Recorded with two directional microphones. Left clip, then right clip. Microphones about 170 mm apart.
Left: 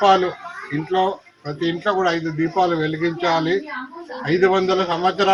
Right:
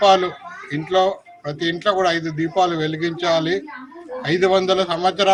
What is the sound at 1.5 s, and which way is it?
Speech, 20° right (ahead or behind).